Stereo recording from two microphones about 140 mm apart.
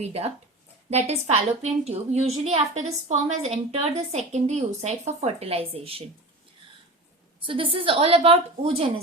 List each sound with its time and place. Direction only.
0.0 s a woman's voice: 45° right (ahead or behind)
7.4 s a woman's voice: 40° right (ahead or behind)